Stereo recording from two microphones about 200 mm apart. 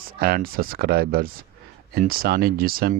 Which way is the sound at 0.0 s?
50° right (ahead or behind).